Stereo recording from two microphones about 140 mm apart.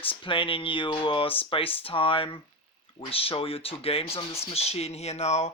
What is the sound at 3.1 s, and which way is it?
Music, 40° left (ahead or behind).